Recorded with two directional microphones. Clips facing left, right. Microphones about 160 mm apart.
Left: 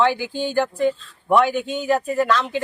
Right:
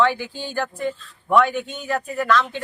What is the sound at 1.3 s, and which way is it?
Speech, 30° left (ahead or behind).